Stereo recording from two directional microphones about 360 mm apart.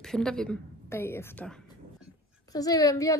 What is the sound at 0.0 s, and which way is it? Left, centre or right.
A woman's voice, centre.